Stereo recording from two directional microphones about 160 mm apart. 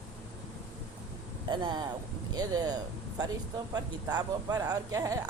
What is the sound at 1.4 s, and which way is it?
Speech, 30° right (ahead or behind).